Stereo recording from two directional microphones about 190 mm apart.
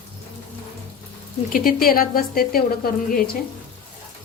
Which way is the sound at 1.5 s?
50° left (ahead or behind).